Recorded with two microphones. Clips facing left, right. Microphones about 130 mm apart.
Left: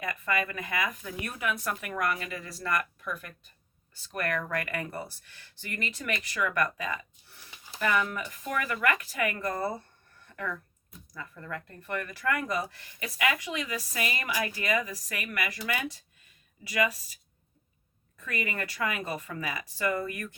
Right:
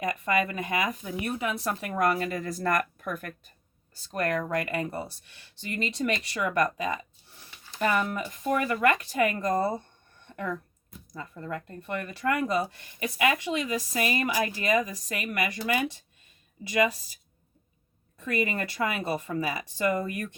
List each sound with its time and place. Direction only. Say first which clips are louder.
0.0 s speech: right 4 dB; 20° right (ahead or behind); by 3.3 s 50° right (ahead or behind)
4.0 s speech: right 4 dB; 30° right (ahead or behind)
7.5 s a sound: left 2 dB; 15° left (ahead or behind)
7.8 s speech: right 2 dB; 30° right (ahead or behind)
10.2 s a sound: right 3 dB; 25° right (ahead or behind)
11.1 s speech: right 4 dB; 25° right (ahead or behind)
18.2 s speech: right 5 dB; 20° right (ahead or behind)